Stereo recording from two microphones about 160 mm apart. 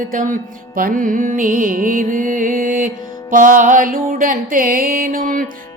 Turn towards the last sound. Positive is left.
turn(degrees=-60)  # may be behind; listen again after turning